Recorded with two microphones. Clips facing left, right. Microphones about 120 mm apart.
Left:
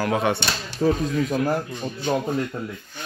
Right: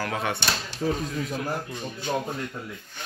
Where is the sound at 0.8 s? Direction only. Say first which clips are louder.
Left 6 dB; 60° left (ahead or behind).